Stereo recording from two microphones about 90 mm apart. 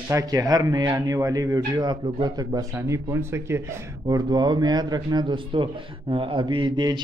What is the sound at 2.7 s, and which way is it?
Speech, 35° right (ahead or behind).